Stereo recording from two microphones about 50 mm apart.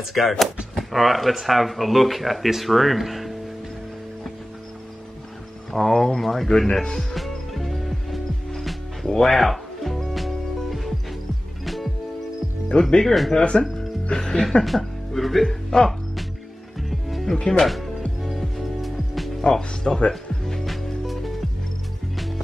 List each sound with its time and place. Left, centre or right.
0.0 s speech: centre
5.7 s speech: centre
7.2 s music: centre
12.7 s speech: centre
13.3 s music: centre
14.2 s speech: centre
16.9 s music: centre
17.5 s speech: centre
18.2 s music: centre
19.4 s speech: centre
20.1 s music: centre